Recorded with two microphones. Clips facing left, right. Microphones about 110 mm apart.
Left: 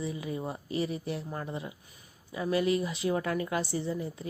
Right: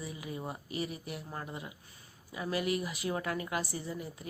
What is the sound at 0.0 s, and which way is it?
Speech, 30° left (ahead or behind).